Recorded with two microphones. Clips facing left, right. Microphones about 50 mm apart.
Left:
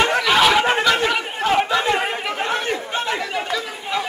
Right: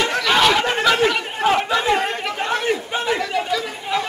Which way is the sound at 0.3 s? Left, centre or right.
Centre.